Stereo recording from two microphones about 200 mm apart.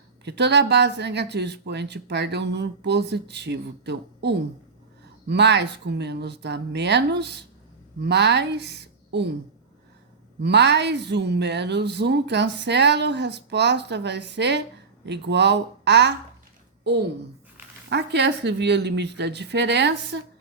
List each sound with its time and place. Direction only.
0.3 s a woman's voice: 60° right (ahead or behind)
10.4 s a woman's voice: 60° right (ahead or behind)
17.8 s a woman's voice: 60° right (ahead or behind)